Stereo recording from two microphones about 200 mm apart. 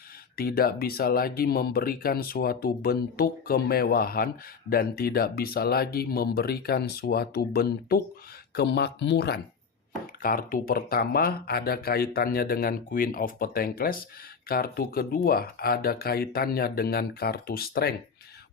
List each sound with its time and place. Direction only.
0.3 s speech: 50° left (ahead or behind)